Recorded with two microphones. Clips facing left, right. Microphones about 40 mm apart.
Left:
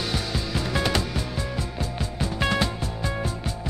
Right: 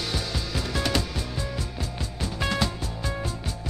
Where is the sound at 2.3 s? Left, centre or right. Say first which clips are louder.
Left 2 dB; centre.